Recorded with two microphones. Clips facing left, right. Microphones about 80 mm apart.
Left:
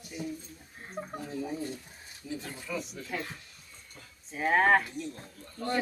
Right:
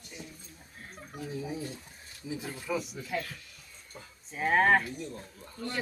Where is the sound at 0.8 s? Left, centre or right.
Left.